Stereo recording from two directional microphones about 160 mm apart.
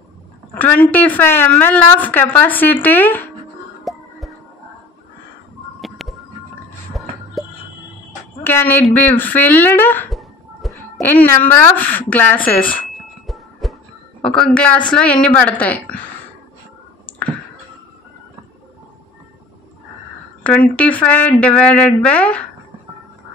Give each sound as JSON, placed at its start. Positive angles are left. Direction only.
{"t": 0.6, "sound": "a woman's voice", "side_deg": 10}
{"t": 3.9, "sound": "music", "side_deg": 0}
{"t": 5.8, "sound": "music", "side_deg": 0}
{"t": 8.5, "sound": "a woman's voice", "side_deg": 15}
{"t": 10.0, "sound": "a sound", "side_deg": 0}
{"t": 11.0, "sound": "a woman's voice", "side_deg": 10}
{"t": 13.3, "sound": "a sound", "side_deg": 0}
{"t": 14.2, "sound": "a woman's voice", "side_deg": 5}
{"t": 20.4, "sound": "a woman's voice", "side_deg": 10}